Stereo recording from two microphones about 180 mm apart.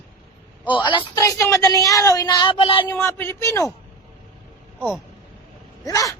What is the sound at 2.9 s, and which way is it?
Speech, 15° left (ahead or behind).